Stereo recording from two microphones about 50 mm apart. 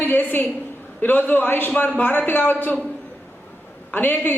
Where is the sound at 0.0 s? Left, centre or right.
Left.